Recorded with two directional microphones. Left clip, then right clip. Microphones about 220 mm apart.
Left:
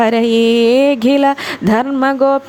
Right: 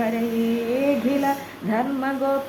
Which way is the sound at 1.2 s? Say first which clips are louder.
Left 10 dB; 50° left (ahead or behind).